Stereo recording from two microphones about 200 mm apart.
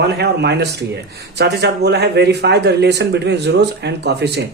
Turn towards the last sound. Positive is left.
turn(degrees=-55)  # may be behind; listen again after turning